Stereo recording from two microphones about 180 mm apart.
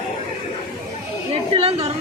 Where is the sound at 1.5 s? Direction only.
30° right (ahead or behind).